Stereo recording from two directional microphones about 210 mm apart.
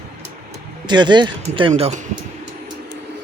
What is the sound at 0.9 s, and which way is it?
Speech, 20° right (ahead or behind).